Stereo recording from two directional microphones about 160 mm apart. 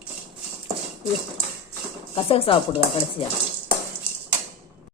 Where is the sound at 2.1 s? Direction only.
35° left (ahead or behind).